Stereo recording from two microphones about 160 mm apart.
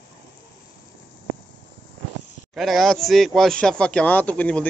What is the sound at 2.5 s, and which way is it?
A man's voice, centre (ahead or behind).